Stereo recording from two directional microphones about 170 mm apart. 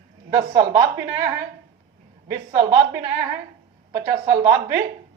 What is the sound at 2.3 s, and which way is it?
A woman's voice, 20° right (ahead or behind).